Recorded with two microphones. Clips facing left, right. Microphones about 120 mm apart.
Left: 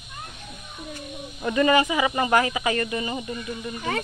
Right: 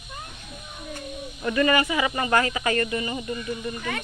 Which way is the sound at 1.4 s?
15° left (ahead or behind).